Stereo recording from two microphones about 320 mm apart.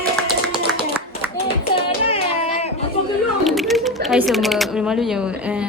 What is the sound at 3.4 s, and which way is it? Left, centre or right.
Typing, centre.